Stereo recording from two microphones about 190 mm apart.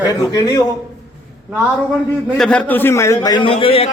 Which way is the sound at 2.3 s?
5° left (ahead or behind).